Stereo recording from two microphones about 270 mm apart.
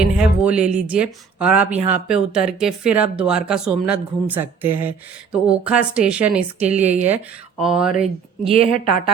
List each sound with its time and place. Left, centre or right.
0.0 s speech: centre
8.5 s a woman's voice: left